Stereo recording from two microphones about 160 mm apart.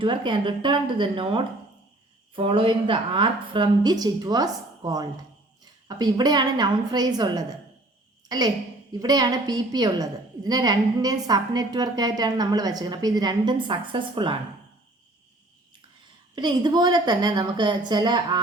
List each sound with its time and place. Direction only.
0.0 s a woman's voice: 30° right (ahead or behind)
16.3 s a woman's voice: 30° right (ahead or behind)